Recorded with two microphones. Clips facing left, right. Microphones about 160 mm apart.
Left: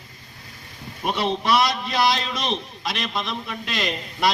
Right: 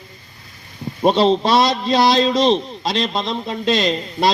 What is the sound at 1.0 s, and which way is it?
A man's voice, 30° right (ahead or behind).